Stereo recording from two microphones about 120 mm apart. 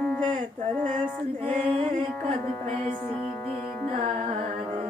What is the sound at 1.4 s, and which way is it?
Music, 60° right (ahead or behind).